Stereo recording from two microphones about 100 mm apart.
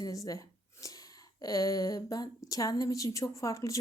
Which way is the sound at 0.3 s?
35° left (ahead or behind).